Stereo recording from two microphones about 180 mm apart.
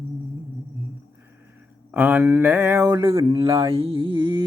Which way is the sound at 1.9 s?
10° right (ahead or behind).